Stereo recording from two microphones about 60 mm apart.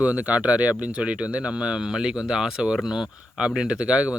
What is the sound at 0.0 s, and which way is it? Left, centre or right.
Speech, right.